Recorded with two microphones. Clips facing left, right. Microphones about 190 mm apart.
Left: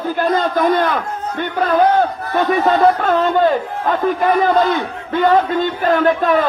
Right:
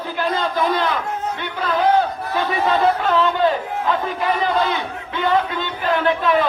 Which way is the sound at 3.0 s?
50° left (ahead or behind).